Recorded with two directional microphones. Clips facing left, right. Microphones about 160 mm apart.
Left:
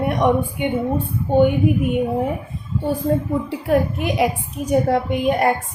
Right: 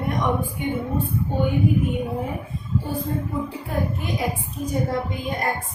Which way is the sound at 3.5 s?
80° left.